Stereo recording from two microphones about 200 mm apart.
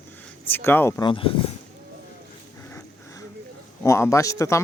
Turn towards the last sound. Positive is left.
turn(degrees=15)  # may be behind; listen again after turning